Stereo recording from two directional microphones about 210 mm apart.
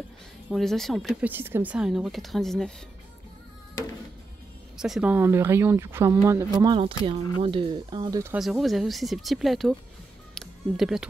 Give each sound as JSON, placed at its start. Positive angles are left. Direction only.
{"t": 0.5, "sound": "speech", "side_deg": 0}
{"t": 4.7, "sound": "speech", "side_deg": 0}
{"t": 8.4, "sound": "speech", "side_deg": 0}
{"t": 10.3, "sound": "music", "side_deg": 0}